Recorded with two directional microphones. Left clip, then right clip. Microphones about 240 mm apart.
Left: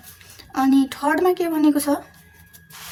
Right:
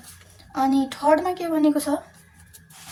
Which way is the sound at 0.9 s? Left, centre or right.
Left.